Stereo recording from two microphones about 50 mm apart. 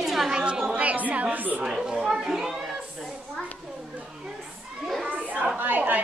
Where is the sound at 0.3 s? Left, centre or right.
Centre.